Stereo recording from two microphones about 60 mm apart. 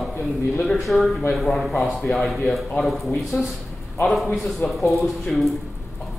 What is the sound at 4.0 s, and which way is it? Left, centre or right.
Speech, centre.